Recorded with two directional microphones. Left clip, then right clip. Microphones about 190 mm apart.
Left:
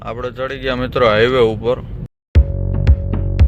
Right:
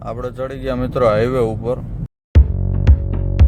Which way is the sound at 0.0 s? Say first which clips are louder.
Left 2 dB; 20° right (ahead or behind).